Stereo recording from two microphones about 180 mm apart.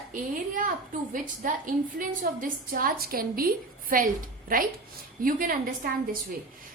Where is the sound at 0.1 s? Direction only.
45° right (ahead or behind).